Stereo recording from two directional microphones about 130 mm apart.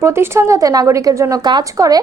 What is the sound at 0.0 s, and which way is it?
Speech, 20° right (ahead or behind).